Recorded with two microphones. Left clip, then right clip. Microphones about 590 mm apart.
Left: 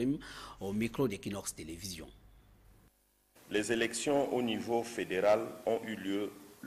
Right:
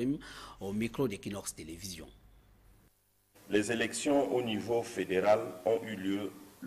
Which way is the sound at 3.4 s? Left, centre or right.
Centre.